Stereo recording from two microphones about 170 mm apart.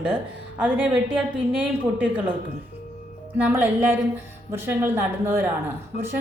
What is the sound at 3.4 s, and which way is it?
Speech, 10° right (ahead or behind).